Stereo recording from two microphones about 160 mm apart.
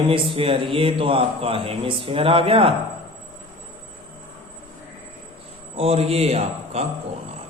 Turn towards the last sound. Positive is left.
turn(degrees=-40)  # may be behind; listen again after turning